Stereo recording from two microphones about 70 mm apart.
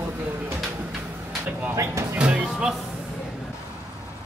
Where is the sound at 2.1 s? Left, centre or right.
Centre.